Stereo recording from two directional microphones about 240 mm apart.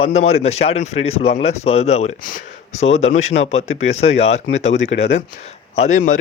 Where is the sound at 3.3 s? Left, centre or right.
Left.